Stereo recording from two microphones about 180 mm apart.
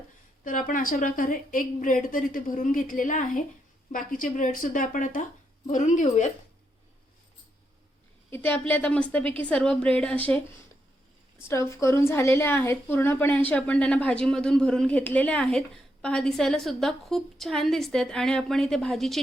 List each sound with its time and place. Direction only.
0.4 s a woman's voice: 50° left (ahead or behind)
8.3 s a woman's voice: 10° left (ahead or behind)
11.4 s a woman's voice: 15° left (ahead or behind)